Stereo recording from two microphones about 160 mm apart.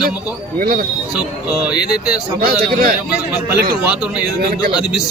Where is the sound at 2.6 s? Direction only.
65° right (ahead or behind).